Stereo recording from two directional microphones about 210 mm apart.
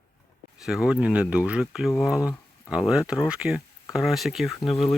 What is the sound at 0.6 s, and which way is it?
Speech, 5° right (ahead or behind).